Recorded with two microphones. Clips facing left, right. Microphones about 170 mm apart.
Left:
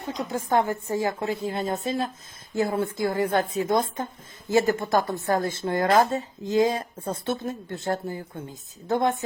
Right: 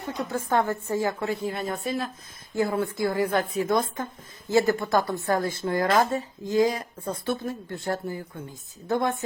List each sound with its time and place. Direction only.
0.1 s a woman's voice: 15° left (ahead or behind)